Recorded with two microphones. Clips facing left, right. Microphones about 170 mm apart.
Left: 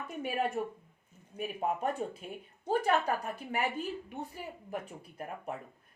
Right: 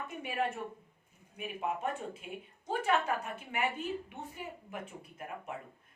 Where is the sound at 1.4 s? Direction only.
40° left (ahead or behind).